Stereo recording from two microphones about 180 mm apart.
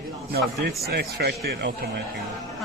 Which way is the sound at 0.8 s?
65° right (ahead or behind).